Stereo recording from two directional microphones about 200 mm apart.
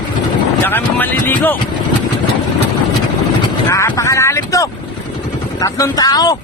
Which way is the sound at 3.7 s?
15° left (ahead or behind).